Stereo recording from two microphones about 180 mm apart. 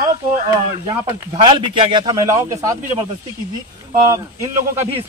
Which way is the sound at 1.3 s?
25° right (ahead or behind).